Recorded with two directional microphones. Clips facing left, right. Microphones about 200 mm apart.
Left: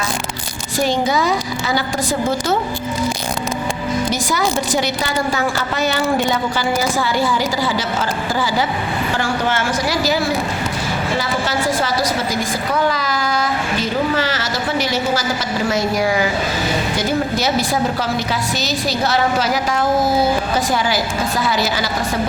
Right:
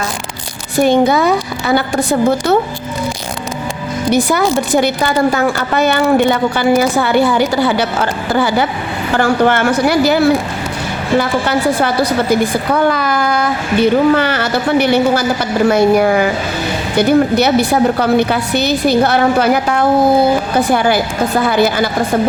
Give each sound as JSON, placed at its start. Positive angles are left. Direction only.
{"t": 0.8, "sound": "a woman's voice", "side_deg": -60}
{"t": 4.1, "sound": "a woman's voice", "side_deg": -60}